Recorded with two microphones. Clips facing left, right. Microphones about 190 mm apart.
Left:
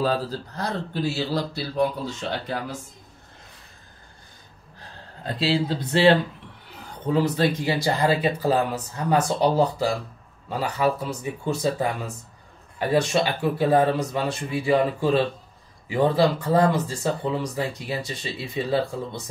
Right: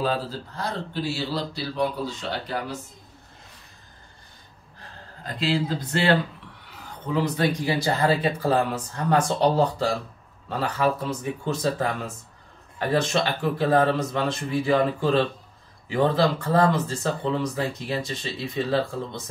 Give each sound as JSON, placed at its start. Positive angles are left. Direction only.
{"t": 0.0, "sound": "speech", "side_deg": 40}
{"t": 5.4, "sound": "speech", "side_deg": 30}